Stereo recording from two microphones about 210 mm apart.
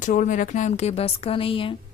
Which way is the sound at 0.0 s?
40° left (ahead or behind).